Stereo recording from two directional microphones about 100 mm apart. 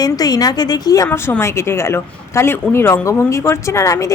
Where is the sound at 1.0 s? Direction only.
25° left (ahead or behind).